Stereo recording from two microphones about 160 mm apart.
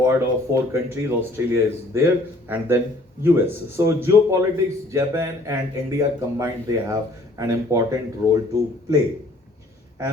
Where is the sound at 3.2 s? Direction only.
15° right (ahead or behind).